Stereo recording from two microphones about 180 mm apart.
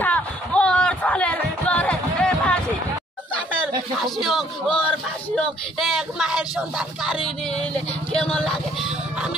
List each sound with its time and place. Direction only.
0.0 s music: 5° left (ahead or behind)
3.6 s a man's voice: centre (ahead or behind)